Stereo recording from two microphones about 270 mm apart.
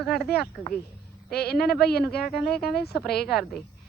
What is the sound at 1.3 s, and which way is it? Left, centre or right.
Speech, left.